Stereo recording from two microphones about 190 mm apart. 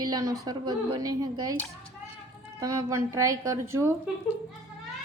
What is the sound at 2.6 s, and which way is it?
Speech, 15° right (ahead or behind).